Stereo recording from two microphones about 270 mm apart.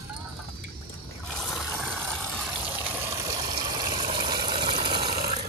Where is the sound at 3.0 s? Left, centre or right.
Centre.